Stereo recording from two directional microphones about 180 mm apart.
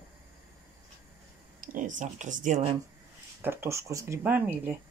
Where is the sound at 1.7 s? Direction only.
45° right (ahead or behind).